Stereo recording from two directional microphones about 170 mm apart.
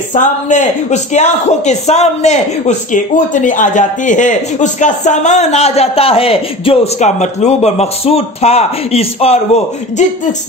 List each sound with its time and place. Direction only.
0.1 s speech: 45° left (ahead or behind)